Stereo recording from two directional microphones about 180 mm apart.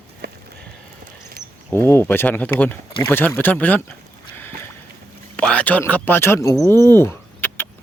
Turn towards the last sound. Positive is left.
turn(degrees=10)  # may be behind; listen again after turning